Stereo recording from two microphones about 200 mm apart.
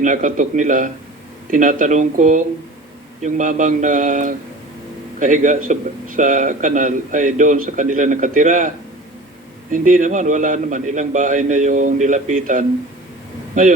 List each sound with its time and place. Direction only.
0.0 s a man's voice: 40° right (ahead or behind)
9.7 s a man's voice: 40° right (ahead or behind)